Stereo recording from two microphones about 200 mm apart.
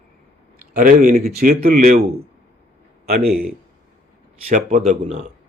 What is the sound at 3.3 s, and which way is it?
Speech, 50° right (ahead or behind).